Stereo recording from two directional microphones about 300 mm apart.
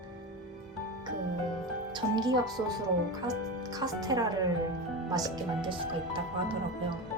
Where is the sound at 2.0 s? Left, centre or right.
Centre.